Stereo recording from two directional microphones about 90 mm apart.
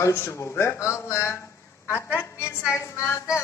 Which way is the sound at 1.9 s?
25° left (ahead or behind).